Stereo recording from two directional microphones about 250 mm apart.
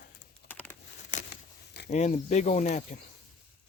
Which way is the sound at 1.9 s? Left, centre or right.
Left.